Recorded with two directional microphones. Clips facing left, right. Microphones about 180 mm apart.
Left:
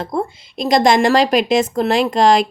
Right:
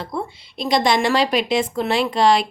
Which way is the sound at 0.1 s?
45° left (ahead or behind).